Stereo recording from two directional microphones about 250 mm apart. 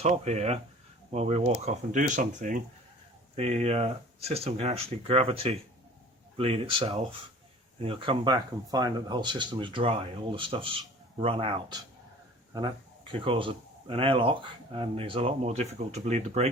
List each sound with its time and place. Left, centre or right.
0.0 s speech: right